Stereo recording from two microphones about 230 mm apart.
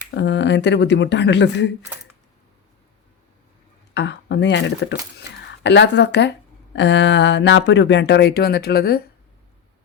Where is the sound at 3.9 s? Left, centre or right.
Left.